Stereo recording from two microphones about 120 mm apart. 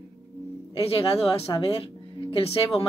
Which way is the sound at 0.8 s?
50° left (ahead or behind).